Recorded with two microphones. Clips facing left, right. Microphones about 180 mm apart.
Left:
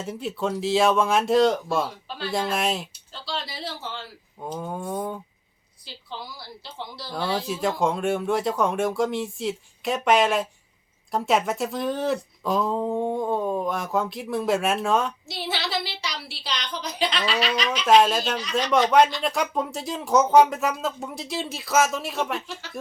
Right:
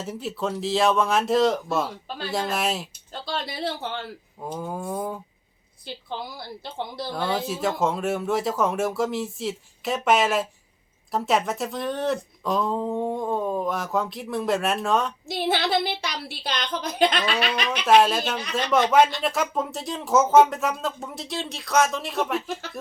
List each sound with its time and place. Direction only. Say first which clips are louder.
0.0 s speech: left 1 dB; centre (ahead or behind)
3.1 s speech: right 3 dB; 50° right (ahead or behind)
4.4 s speech: even; centre (ahead or behind)
5.8 s a woman's voice: right 4 dB; 55° right (ahead or behind)
7.1 s speech: left 1 dB; centre (ahead or behind)
15.3 s a woman's voice: right 6 dB; 55° right (ahead or behind)
17.8 s speech: even; centre (ahead or behind)